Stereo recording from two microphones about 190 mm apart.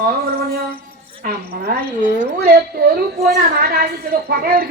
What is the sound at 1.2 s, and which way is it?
A woman's voice, 50° right (ahead or behind).